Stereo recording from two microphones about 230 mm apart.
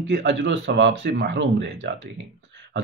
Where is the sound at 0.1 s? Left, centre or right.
Right.